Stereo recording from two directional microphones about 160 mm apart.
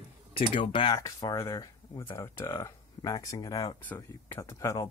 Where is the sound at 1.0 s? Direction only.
20° left (ahead or behind).